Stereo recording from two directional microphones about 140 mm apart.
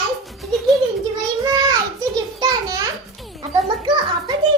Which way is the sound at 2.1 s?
30° right (ahead or behind).